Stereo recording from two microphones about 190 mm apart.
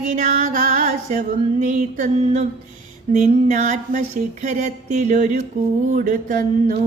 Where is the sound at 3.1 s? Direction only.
40° right (ahead or behind).